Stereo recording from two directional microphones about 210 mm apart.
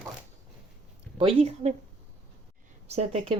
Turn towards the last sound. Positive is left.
turn(degrees=-30)  # may be behind; listen again after turning